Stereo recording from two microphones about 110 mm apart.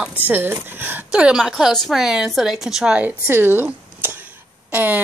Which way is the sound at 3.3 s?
20° right (ahead or behind).